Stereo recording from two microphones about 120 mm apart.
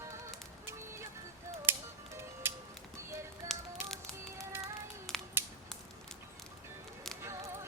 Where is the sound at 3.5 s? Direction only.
5° left (ahead or behind).